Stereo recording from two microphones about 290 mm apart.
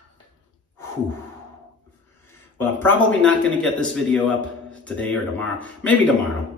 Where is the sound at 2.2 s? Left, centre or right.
Centre.